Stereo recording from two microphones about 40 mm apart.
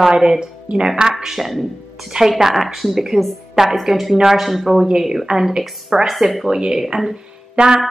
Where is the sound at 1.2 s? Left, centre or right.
Centre.